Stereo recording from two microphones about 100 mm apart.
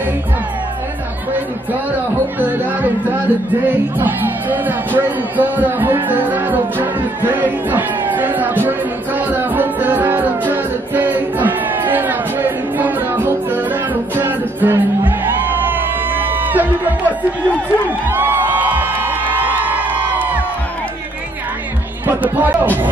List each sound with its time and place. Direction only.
2.3 s speech: 20° right (ahead or behind)
13.3 s music: 20° right (ahead or behind)
17.8 s crowd: 20° right (ahead or behind)
22.0 s speech: 20° right (ahead or behind)